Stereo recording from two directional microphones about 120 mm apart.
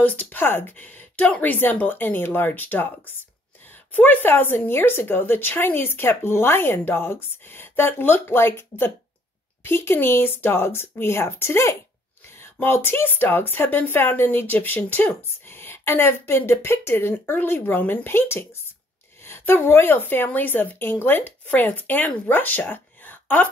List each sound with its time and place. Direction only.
0.0 s a woman's voice: 15° left (ahead or behind)